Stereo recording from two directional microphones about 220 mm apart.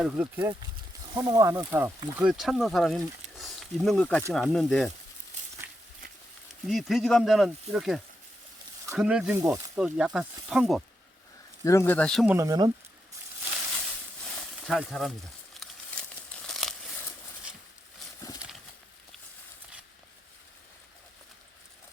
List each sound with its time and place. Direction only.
0.0 s speech: 5° right (ahead or behind)
3.3 s snake: centre (ahead or behind)
4.3 s speech: centre (ahead or behind)
6.7 s speech: centre (ahead or behind)
11.6 s speech: 15° left (ahead or behind); by 12.7 s 20° right (ahead or behind)
14.7 s speech: centre (ahead or behind)
15.6 s crumpling: 5° left (ahead or behind)
18.2 s horse: 15° left (ahead or behind)